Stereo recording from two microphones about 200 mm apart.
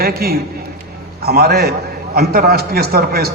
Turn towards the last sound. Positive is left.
turn(degrees=-50)  # may be behind; listen again after turning